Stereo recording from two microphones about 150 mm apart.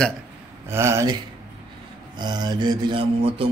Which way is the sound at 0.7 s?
20° right (ahead or behind).